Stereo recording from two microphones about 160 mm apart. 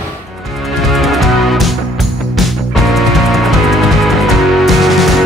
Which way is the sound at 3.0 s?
Centre (ahead or behind).